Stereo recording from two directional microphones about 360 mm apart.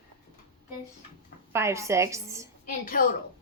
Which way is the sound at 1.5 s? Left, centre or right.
Centre.